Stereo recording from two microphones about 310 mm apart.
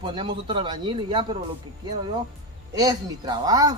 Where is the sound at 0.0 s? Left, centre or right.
Centre.